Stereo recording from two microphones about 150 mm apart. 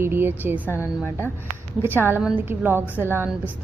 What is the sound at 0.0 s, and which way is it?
A woman's voice, 15° right (ahead or behind).